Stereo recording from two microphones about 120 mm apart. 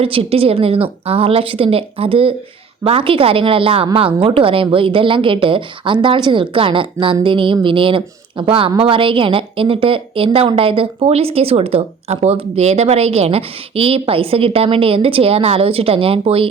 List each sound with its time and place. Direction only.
0.0 s a woman's voice: 50° right (ahead or behind)